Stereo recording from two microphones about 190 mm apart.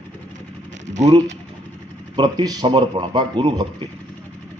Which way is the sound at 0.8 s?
40° right (ahead or behind).